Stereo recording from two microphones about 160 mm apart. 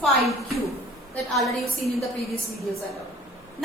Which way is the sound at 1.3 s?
Centre (ahead or behind).